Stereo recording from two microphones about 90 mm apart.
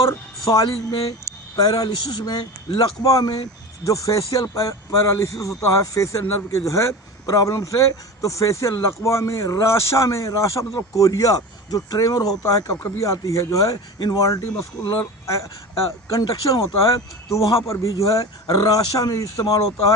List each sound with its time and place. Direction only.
0.6 s a man's voice: 45° left (ahead or behind)